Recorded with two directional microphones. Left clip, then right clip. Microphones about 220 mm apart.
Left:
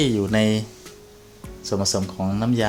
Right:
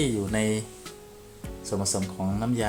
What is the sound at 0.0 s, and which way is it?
Speech, 35° left (ahead or behind).